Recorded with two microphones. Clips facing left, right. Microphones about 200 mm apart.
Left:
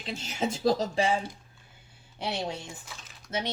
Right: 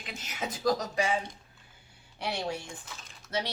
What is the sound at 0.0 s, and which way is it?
Speech, 30° left (ahead or behind).